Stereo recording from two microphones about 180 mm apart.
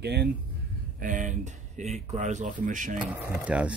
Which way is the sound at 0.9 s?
45° right (ahead or behind).